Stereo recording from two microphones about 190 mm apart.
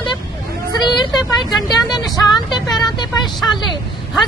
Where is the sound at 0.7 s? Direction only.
20° left (ahead or behind).